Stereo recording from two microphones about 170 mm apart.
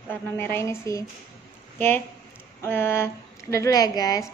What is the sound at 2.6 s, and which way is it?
A woman's voice, 15° left (ahead or behind).